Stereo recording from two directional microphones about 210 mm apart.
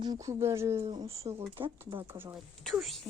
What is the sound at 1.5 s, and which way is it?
Speech, 25° right (ahead or behind).